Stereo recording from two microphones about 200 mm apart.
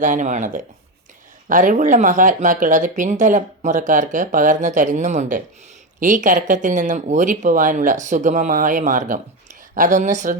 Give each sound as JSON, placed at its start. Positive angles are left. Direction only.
{"t": 0.0, "sound": "speech", "side_deg": -40}